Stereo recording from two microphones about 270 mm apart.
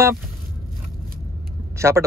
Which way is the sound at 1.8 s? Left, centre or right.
Centre.